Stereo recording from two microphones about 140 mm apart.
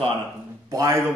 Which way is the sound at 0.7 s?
20° right (ahead or behind).